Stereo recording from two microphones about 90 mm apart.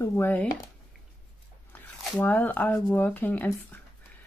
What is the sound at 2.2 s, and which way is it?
Speech, 20° left (ahead or behind).